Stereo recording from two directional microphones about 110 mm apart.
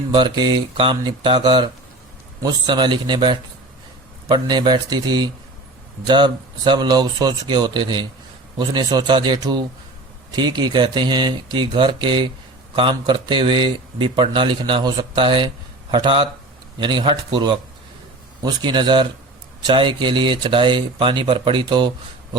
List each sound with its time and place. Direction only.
0.1 s speech: 45° right (ahead or behind)